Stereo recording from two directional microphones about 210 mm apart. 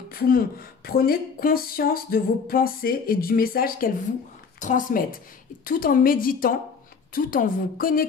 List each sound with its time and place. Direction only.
0.1 s speech: 45° left (ahead or behind)